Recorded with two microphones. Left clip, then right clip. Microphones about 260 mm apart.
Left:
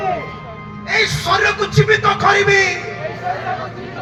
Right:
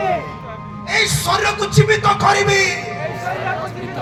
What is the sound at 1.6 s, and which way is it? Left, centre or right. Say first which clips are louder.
Music: left 1 dB; right.